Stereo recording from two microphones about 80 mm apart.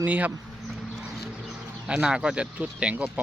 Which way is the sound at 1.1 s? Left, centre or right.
Centre.